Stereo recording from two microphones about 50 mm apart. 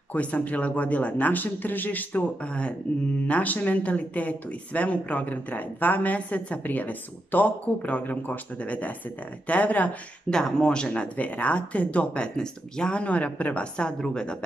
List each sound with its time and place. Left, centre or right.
0.1 s speech: left
2.4 s speech: left
3.3 s speech: left
10.3 s speech: centre